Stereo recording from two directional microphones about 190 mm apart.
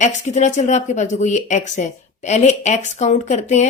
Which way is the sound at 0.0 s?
40° left (ahead or behind).